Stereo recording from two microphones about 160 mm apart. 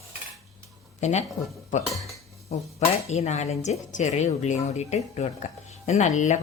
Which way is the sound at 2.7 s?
45° left (ahead or behind).